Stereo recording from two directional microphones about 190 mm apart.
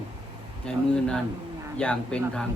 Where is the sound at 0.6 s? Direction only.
5° left (ahead or behind).